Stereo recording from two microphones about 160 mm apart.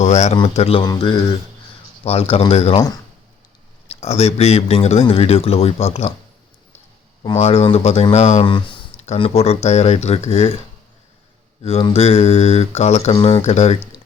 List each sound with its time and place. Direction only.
0.0 s speech: 45° left (ahead or behind)
0.9 s mantra: 30° left (ahead or behind)
2.0 s speech: 40° left (ahead or behind)
3.8 s speech: 40° left (ahead or behind)
7.2 s speech: 40° left (ahead or behind)
11.6 s speech: 35° left (ahead or behind)